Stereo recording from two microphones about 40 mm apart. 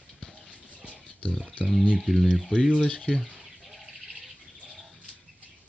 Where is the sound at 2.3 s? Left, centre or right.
Centre.